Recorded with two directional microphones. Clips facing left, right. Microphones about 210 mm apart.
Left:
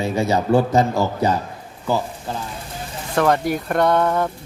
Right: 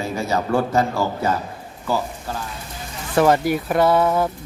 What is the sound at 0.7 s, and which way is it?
Speech, 20° left (ahead or behind).